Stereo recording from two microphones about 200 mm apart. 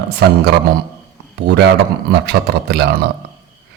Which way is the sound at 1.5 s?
60° right (ahead or behind).